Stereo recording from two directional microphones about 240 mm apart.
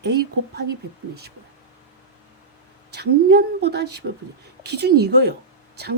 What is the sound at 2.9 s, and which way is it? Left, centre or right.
Speech, right.